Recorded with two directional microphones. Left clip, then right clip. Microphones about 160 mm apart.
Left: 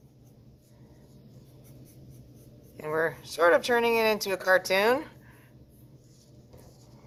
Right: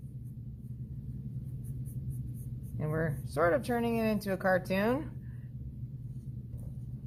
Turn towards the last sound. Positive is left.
turn(degrees=20)  # may be behind; listen again after turning